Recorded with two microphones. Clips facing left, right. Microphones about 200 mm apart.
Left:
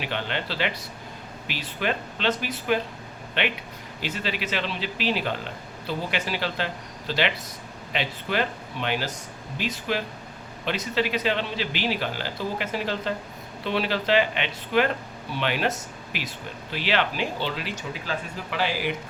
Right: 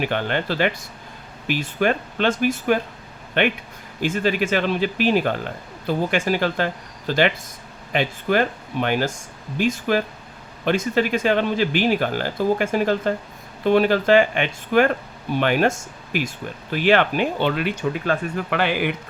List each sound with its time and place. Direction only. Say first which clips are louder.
0.0 s speech: right 7 dB; 50° right (ahead or behind)